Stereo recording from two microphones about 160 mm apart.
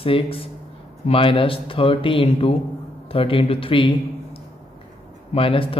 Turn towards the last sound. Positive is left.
turn(degrees=35)  # may be behind; listen again after turning